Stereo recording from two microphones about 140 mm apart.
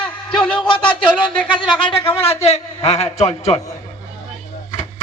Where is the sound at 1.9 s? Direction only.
40° left (ahead or behind).